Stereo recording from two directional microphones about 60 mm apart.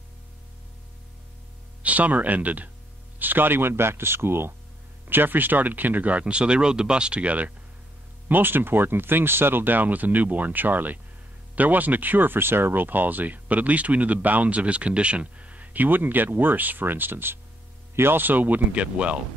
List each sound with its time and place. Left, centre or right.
1.8 s speech: right
8.3 s speech: right